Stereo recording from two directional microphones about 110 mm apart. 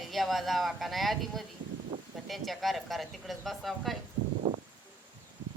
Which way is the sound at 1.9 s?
50° right (ahead or behind).